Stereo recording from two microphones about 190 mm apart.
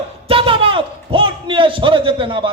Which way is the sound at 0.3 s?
30° right (ahead or behind).